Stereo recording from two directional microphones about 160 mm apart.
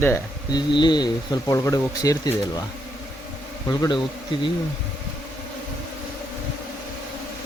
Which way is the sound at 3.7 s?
25° left (ahead or behind).